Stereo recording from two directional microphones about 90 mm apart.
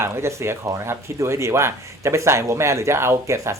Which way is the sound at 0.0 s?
30° right (ahead or behind).